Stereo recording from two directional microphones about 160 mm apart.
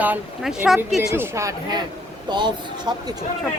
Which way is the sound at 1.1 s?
15° right (ahead or behind).